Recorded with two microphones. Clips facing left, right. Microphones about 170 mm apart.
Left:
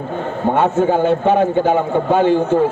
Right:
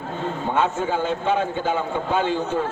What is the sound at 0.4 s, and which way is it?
A man's voice, 55° left (ahead or behind).